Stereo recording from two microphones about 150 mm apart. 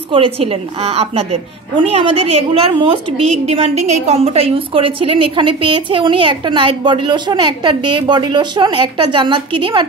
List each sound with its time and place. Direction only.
0.1 s a woman's voice: 40° right (ahead or behind)
3.4 s a woman's voice: 45° right (ahead or behind)